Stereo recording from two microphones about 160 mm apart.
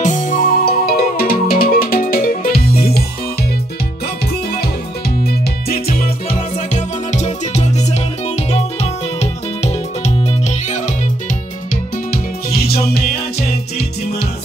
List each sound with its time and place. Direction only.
0.0 s music: 50° left (ahead or behind); by 3.0 s 70° left (ahead or behind)
5.2 s music: 75° left (ahead or behind)
6.7 s music: 45° left (ahead or behind)
12.4 s music: 75° left (ahead or behind)